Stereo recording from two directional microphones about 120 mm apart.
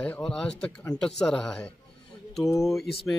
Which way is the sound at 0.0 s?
10° left (ahead or behind).